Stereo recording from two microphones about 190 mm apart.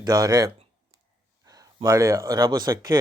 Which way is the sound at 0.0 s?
20° right (ahead or behind).